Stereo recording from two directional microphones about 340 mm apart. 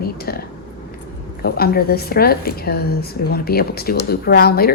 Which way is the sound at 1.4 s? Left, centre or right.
Left.